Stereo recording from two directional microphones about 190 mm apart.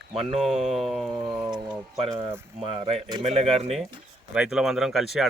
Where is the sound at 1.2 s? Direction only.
25° right (ahead or behind).